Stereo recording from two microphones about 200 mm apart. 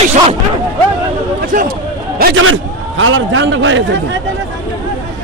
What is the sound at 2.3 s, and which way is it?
A man's voice, 85° right.